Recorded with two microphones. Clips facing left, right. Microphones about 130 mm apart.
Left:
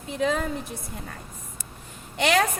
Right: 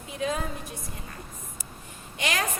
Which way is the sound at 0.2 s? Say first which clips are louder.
Left 4 dB; 90° left.